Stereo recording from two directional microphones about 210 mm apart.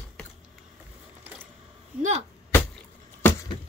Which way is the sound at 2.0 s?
30° right (ahead or behind).